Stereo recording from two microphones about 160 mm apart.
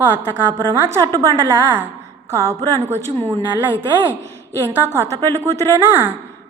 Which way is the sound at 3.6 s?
10° right (ahead or behind).